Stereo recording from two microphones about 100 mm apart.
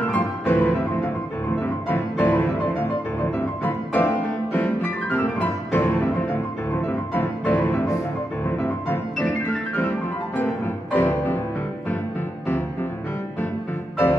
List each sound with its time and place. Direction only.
0.0 s music: 20° left (ahead or behind)
3.6 s piano: 20° left (ahead or behind)
8.5 s music: 20° left (ahead or behind)